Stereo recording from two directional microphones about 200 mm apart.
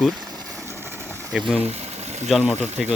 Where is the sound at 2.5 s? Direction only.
35° right (ahead or behind).